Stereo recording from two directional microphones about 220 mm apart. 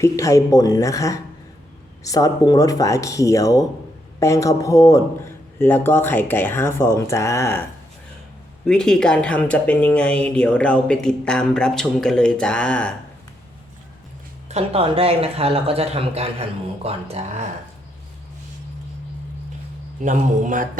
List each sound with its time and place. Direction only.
0.0 s a man's voice: 15° left (ahead or behind)
8.6 s a woman's voice: 5° left (ahead or behind)
14.4 s speech: 30° right (ahead or behind)
20.0 s speech: 35° right (ahead or behind)